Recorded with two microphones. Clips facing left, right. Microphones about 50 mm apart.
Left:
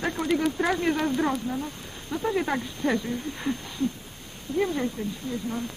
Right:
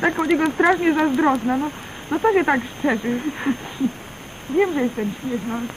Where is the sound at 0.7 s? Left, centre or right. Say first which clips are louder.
Right 7 dB; right.